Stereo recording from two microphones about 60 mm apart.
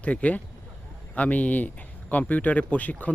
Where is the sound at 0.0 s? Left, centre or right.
Left.